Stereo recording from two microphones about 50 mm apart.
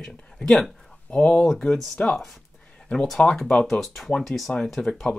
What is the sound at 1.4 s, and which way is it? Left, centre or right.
Speech, centre.